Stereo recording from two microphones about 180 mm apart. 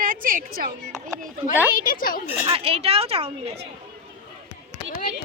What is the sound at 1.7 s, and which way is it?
Speech, 50° left (ahead or behind).